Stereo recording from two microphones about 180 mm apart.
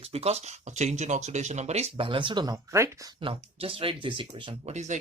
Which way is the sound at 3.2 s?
30° right (ahead or behind).